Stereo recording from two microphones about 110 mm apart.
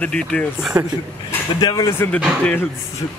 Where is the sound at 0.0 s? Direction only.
10° left (ahead or behind).